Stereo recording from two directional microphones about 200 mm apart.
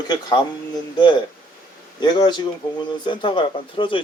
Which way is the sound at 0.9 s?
20° left (ahead or behind).